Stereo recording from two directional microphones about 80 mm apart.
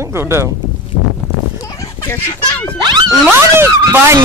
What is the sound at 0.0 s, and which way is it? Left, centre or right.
Speech, right.